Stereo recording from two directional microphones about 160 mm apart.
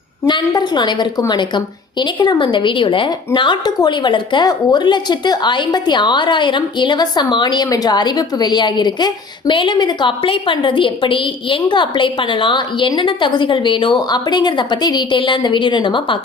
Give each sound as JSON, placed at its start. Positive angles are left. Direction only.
{"t": 0.3, "sound": "a woman's voice", "side_deg": 25}